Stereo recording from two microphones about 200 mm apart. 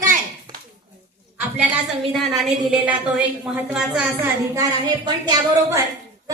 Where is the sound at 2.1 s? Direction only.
Centre (ahead or behind).